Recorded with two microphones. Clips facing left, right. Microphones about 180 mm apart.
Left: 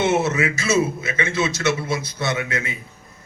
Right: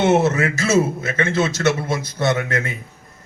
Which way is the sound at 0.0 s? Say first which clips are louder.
Right 3 dB; 55° right (ahead or behind).